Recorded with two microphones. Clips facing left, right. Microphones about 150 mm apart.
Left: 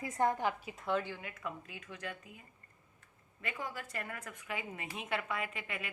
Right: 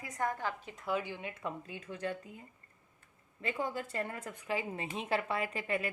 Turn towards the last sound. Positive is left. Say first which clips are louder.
# right 7 dB
turn(degrees=-35)  # may be behind; listen again after turning